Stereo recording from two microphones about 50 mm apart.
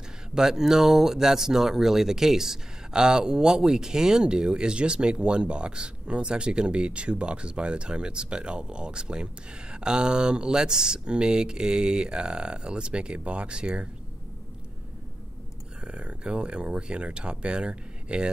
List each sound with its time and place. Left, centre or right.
0.3 s speech: centre
15.8 s speech: right